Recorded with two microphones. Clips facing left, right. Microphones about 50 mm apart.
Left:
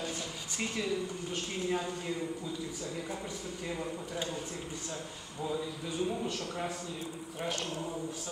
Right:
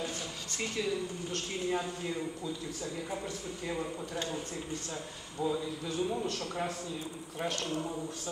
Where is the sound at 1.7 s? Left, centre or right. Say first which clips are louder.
Right 1 dB; centre.